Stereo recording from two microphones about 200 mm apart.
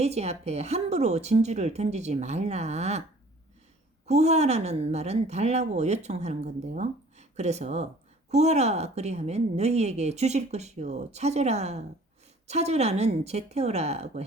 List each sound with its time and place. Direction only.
0.0 s a woman's voice: 30° right (ahead or behind)
4.0 s a woman's voice: 35° right (ahead or behind)